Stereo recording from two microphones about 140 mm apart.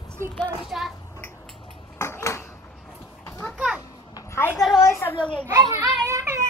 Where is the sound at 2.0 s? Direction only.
20° left (ahead or behind).